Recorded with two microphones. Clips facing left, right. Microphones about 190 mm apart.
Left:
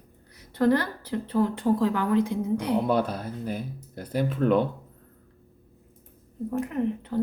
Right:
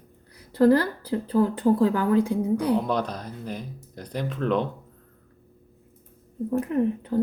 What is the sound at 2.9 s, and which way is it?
A woman's voice, 5° left (ahead or behind).